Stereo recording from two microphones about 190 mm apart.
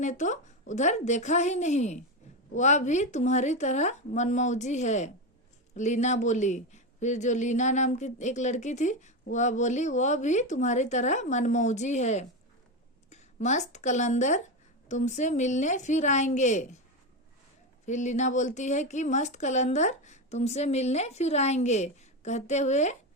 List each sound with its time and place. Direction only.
0.0 s speech: 40° left (ahead or behind)
17.8 s speech: 40° left (ahead or behind)